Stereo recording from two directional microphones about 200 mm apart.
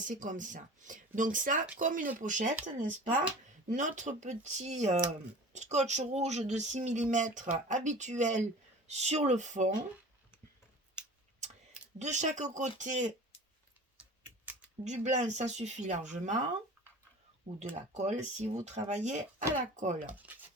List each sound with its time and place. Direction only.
0.0 s speech: 40° right (ahead or behind)
11.9 s speech: 35° right (ahead or behind)
14.8 s speech: 35° right (ahead or behind)
17.5 s speech: 40° right (ahead or behind)
20.1 s speech: 10° right (ahead or behind)